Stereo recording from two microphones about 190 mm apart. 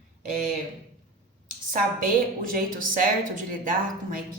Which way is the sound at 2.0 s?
50° right (ahead or behind).